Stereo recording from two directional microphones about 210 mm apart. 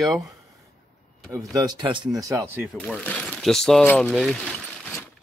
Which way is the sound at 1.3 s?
20° right (ahead or behind).